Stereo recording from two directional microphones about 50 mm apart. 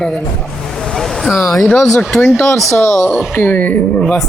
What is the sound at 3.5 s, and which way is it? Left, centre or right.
Speech, left.